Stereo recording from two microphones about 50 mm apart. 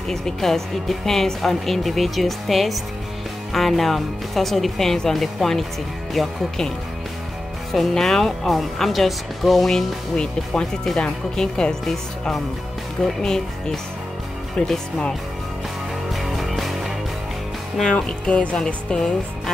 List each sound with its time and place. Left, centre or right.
0.1 s speech: centre
7.9 s speech: centre
9.7 s speech: centre
16.1 s music: centre
17.8 s speech: centre
18.9 s speech: centre